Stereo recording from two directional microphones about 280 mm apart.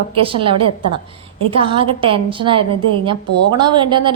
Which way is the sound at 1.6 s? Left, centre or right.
Centre.